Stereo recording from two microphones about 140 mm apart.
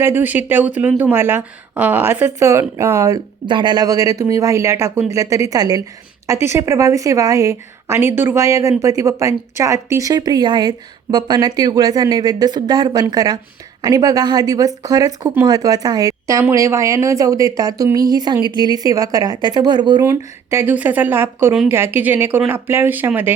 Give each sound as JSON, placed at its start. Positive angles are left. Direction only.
{"t": 0.0, "sound": "a woman's voice", "side_deg": -15}
{"t": 3.4, "sound": "speech", "side_deg": -35}
{"t": 20.1, "sound": "a woman's voice", "side_deg": -15}